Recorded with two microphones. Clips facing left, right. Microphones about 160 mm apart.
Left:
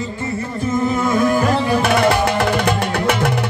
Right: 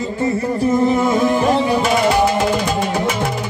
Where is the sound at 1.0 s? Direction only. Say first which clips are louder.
Right 1 dB; 25° right (ahead or behind).